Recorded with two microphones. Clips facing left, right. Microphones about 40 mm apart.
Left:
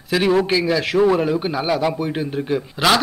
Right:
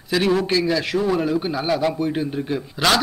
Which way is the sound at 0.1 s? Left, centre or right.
Centre.